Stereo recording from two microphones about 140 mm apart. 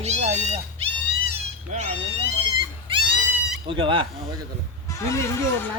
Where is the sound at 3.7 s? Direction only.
35° right (ahead or behind).